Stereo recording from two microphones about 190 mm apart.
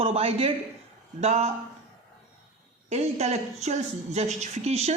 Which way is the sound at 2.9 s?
35° right (ahead or behind).